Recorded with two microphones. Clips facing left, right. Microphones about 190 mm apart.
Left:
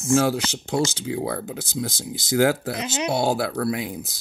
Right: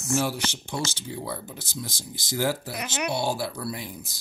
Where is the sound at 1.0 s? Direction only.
90° left.